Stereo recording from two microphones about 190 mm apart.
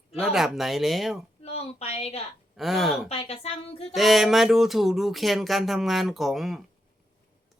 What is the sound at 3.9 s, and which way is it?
Speech, centre (ahead or behind).